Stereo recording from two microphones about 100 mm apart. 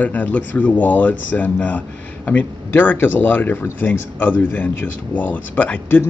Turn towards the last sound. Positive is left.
turn(degrees=20)  # may be behind; listen again after turning